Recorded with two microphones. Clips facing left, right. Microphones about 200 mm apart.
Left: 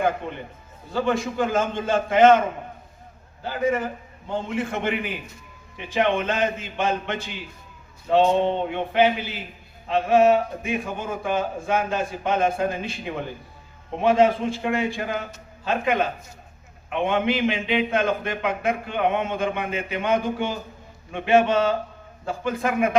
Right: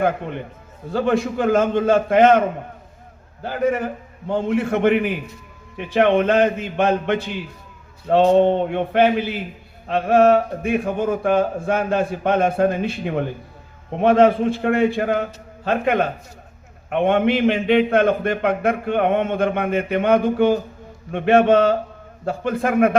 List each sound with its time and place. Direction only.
0.9 s a man's voice: 60° right (ahead or behind)
3.4 s a man's voice: 55° right (ahead or behind)
8.3 s a sound: 50° right (ahead or behind)
9.9 s a man's voice: 60° right (ahead or behind)